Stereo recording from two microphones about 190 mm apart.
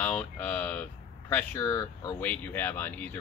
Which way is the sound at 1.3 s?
10° left (ahead or behind).